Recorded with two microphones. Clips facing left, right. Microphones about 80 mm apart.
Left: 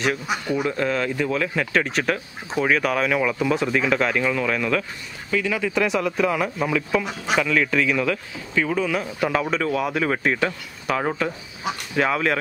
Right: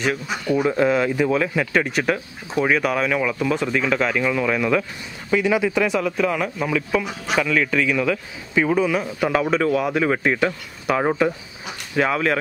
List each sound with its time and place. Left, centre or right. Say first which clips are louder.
0.7 s speech: right 7 dB; centre
5.7 s speech: right 1 dB; centre
8.5 s speech: right 4 dB; centre
12.0 s speech: right 2 dB; centre